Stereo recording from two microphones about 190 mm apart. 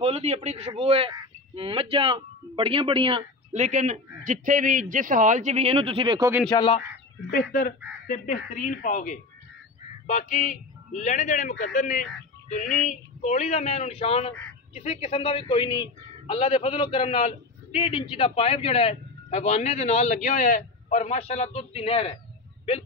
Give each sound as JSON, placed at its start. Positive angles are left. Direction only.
{"t": 0.0, "sound": "speech", "side_deg": -35}
{"t": 3.5, "sound": "a man's voice", "side_deg": -40}
{"t": 6.5, "sound": "speech", "side_deg": 25}
{"t": 7.2, "sound": "a man's voice", "side_deg": 50}